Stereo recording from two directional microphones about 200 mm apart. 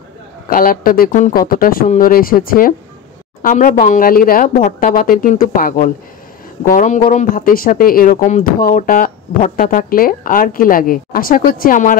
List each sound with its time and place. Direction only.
0.5 s speech: 45° left (ahead or behind)